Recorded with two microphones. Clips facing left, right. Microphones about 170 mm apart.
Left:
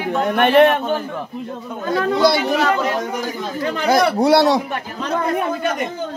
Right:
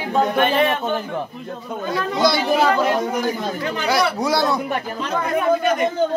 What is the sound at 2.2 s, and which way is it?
Speech, 60° left (ahead or behind).